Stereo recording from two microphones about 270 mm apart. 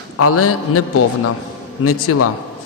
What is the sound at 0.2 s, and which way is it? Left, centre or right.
A man's voice, left.